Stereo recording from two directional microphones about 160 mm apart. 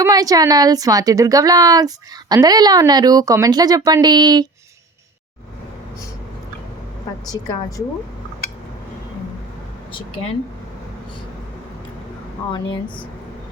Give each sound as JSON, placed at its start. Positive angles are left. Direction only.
{"t": 0.0, "sound": "speech", "side_deg": -25}
{"t": 12.5, "sound": "speech", "side_deg": 30}